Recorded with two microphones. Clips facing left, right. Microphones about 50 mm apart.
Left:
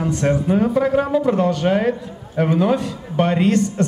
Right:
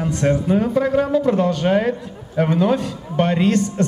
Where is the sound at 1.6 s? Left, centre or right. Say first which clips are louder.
Right 1 dB; centre.